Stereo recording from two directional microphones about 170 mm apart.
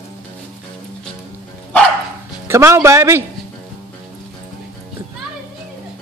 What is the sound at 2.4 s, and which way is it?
Speech, 15° right (ahead or behind).